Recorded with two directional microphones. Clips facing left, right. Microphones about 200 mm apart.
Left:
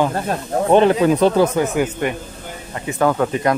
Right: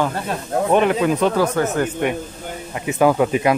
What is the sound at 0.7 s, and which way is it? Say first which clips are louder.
Speech: left 4 dB; 30° left (ahead or behind).